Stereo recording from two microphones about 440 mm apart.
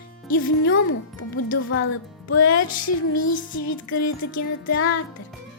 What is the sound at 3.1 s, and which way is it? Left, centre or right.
Music, left.